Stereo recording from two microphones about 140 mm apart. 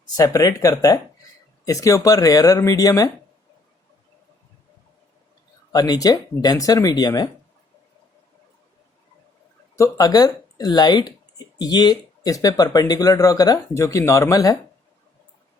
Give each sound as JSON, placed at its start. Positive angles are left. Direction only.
{"t": 0.0, "sound": "speech", "side_deg": 25}
{"t": 5.7, "sound": "speech", "side_deg": 25}
{"t": 9.7, "sound": "speech", "side_deg": 25}